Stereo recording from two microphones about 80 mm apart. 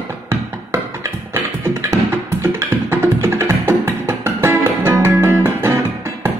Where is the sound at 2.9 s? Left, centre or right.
Right.